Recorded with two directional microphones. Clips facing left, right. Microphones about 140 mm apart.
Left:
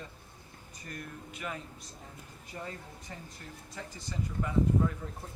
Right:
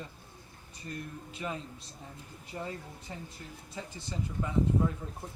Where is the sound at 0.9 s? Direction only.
25° right (ahead or behind).